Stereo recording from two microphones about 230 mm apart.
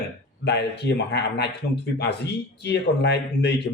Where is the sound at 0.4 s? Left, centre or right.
Left.